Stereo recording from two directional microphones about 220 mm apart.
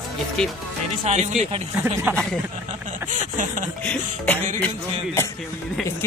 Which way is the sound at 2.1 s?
Centre (ahead or behind).